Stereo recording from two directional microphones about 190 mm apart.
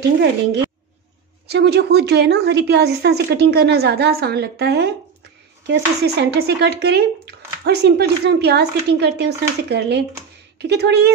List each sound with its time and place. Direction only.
1.5 s speech: 60° right (ahead or behind)